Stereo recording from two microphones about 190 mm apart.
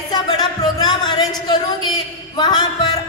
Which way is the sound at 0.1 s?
20° left (ahead or behind).